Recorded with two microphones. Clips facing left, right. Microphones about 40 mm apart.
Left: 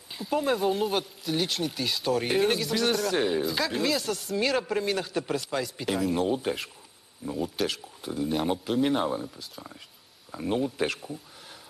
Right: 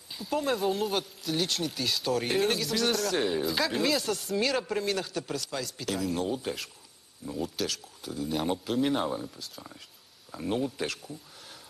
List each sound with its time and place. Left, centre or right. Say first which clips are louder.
0.1 s speech: left 3 dB; centre
8.4 s speech: left 1 dB; centre
10.8 s speech: left 5 dB; centre